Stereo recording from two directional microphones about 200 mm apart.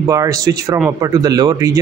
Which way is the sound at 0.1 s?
15° right (ahead or behind).